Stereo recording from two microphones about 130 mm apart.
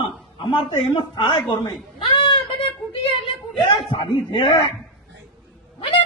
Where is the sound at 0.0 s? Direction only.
40° left (ahead or behind).